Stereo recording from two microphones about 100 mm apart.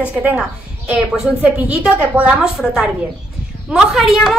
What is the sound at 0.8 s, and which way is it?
A woman's voice, 10° right (ahead or behind).